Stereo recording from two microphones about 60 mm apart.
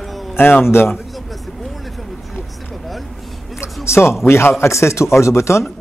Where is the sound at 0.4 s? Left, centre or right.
Left.